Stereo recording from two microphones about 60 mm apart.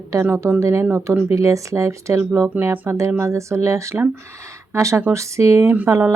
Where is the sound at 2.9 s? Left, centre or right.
Right.